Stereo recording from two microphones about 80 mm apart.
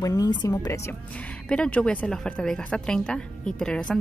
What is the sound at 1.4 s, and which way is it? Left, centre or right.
A woman's voice, centre.